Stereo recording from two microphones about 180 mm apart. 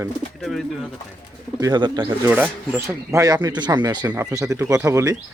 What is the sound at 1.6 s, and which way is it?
Speech, 25° right (ahead or behind).